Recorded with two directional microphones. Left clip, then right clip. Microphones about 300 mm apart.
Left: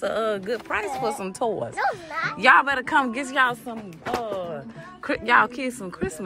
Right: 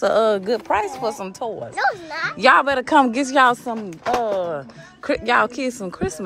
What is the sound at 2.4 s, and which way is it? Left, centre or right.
A child's voice, centre.